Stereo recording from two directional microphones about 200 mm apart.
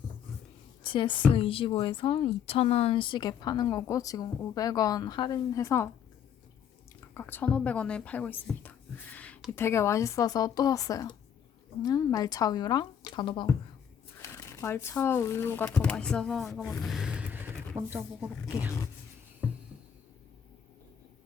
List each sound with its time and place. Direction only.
0.8 s a woman's voice: 25° left (ahead or behind)
7.1 s speech: 10° left (ahead or behind); by 18.7 s 10° right (ahead or behind)